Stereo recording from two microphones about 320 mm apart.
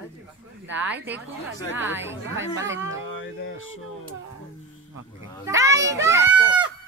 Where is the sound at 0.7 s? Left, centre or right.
Centre.